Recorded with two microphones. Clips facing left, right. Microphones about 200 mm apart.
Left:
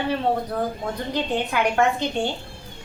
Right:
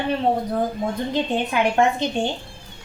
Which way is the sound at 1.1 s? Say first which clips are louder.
Even; 25° right (ahead or behind).